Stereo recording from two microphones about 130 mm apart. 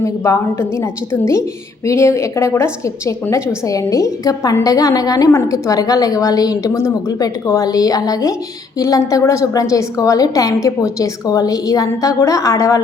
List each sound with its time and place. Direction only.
0.0 s a woman's voice: 20° left (ahead or behind)